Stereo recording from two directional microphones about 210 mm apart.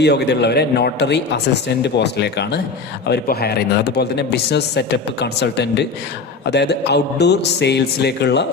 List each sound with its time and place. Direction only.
0.0 s a man's voice: 50° left (ahead or behind)